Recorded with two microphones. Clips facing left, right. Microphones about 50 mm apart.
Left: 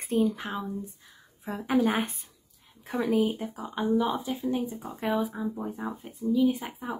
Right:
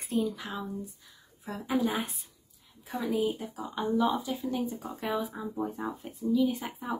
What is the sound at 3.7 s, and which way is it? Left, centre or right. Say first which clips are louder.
Speech: left 1 dB; left.